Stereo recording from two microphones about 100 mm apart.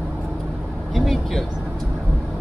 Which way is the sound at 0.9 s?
Centre (ahead or behind).